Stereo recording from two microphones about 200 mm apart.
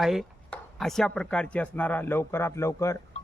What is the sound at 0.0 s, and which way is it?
A man's voice, centre (ahead or behind).